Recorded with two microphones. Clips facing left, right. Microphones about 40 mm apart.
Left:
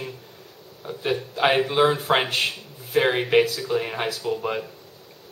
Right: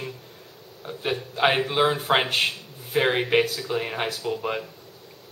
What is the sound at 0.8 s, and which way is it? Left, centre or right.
Speech, centre.